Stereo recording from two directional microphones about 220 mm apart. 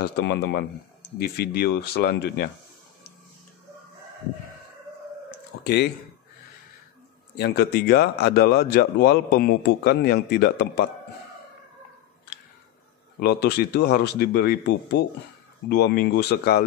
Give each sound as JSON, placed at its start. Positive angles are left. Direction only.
{"t": 0.0, "sound": "speech", "side_deg": 50}
{"t": 5.6, "sound": "speech", "side_deg": 50}
{"t": 7.3, "sound": "speech", "side_deg": 45}
{"t": 13.2, "sound": "speech", "side_deg": 45}